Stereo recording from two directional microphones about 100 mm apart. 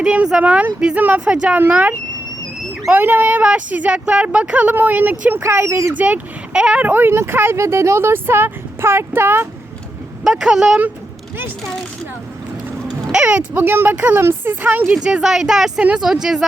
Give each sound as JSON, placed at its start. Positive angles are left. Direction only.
{"t": 0.0, "sound": "speech", "side_deg": -10}
{"t": 6.0, "sound": "speech", "side_deg": -10}
{"t": 10.2, "sound": "speech", "side_deg": -5}
{"t": 13.1, "sound": "speech", "side_deg": -10}
{"t": 14.9, "sound": "speech", "side_deg": -5}